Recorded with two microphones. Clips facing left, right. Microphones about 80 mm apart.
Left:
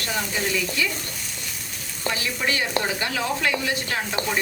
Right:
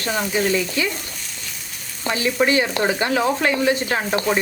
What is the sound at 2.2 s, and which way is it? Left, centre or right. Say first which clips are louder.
Speech: right 10 dB; right.